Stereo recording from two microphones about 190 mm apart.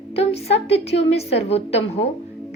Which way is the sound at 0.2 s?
30° left (ahead or behind).